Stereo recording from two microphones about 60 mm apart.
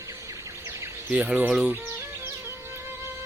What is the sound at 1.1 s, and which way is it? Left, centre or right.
Speech, centre.